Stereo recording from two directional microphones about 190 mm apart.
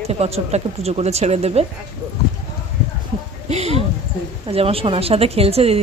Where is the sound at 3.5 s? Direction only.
35° right (ahead or behind).